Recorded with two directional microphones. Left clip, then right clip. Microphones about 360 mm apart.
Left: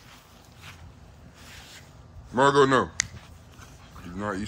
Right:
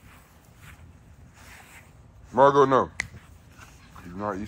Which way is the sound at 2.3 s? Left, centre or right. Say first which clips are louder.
Right 2 dB; centre.